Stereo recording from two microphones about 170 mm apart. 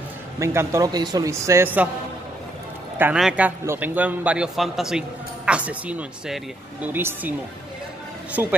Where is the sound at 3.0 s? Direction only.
5° right (ahead or behind).